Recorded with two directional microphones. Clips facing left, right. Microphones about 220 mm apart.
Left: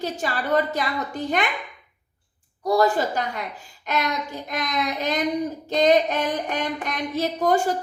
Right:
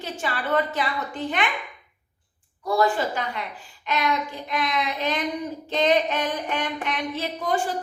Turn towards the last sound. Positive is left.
turn(degrees=40)  # may be behind; listen again after turning